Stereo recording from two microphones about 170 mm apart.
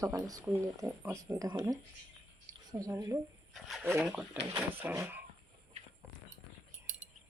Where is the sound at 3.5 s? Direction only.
Centre (ahead or behind).